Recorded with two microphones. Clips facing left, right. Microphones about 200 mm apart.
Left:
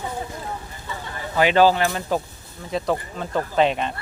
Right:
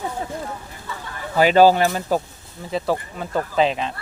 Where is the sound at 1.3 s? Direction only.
40° right (ahead or behind).